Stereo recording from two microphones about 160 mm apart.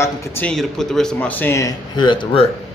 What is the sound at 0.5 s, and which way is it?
Speech, centre (ahead or behind).